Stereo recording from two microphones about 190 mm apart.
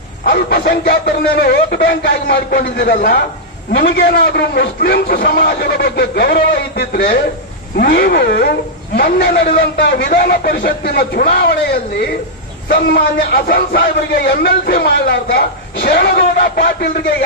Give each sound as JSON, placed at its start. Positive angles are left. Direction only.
{"t": 0.2, "sound": "a man's voice", "side_deg": 55}